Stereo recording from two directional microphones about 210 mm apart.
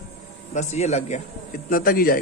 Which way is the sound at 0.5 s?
35° left (ahead or behind).